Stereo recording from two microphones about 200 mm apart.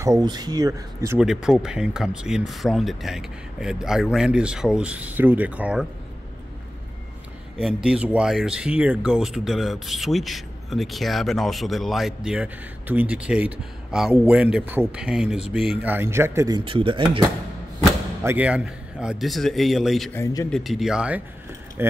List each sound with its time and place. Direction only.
0.0 s speech: 20° right (ahead or behind)
1.2 s speech: 5° right (ahead or behind)
7.6 s speech: 5° right (ahead or behind); by 17.2 s 25° right (ahead or behind)
18.2 s speech: 10° right (ahead or behind)